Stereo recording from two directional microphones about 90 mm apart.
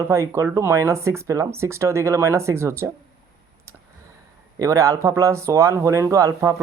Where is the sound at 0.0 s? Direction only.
35° right (ahead or behind).